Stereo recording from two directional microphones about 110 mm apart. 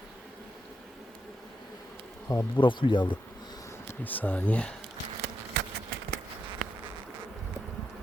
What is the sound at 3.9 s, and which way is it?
Speech, 15° left (ahead or behind).